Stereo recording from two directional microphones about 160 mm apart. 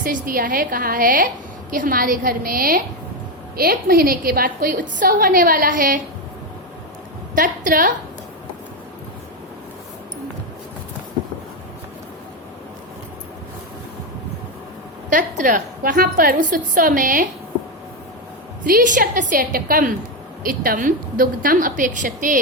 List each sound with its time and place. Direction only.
0.0 s a woman's voice: 60° right (ahead or behind)
7.3 s a woman's voice: 60° right (ahead or behind)
15.1 s a woman's voice: 55° right (ahead or behind)
18.6 s a woman's voice: 60° right (ahead or behind)